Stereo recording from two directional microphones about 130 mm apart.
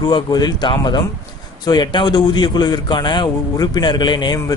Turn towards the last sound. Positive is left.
turn(degrees=35)  # may be behind; listen again after turning